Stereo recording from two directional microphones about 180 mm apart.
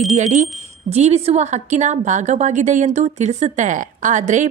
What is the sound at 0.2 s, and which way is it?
A woman's voice, 40° right (ahead or behind).